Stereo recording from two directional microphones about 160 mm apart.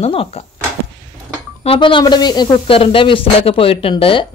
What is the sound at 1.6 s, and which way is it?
Speech, 35° left (ahead or behind).